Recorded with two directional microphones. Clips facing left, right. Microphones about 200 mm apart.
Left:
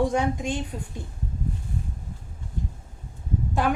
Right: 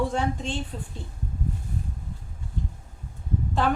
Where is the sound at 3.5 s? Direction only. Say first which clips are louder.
Even; 10° left (ahead or behind).